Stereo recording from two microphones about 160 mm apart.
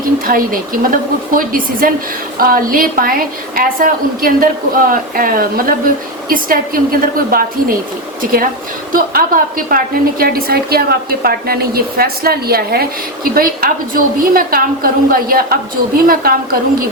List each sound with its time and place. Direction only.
0.0 s a woman's voice: 65° right (ahead or behind)